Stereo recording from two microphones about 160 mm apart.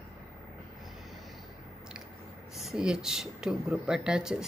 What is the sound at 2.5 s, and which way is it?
Speech, centre (ahead or behind).